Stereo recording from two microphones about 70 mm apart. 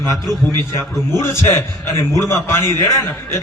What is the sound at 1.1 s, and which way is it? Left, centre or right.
A man's voice, left.